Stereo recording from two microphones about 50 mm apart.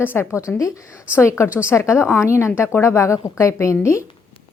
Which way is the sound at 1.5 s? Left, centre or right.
Left.